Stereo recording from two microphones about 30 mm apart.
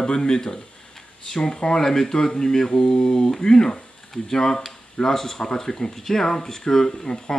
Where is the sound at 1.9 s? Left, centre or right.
Centre.